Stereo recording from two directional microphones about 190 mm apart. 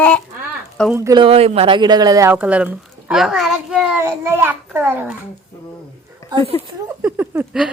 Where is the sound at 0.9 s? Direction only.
15° right (ahead or behind).